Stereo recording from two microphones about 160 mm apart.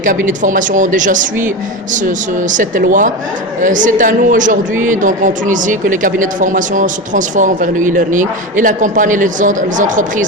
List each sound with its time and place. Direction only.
0.0 s speech: 55° right (ahead or behind)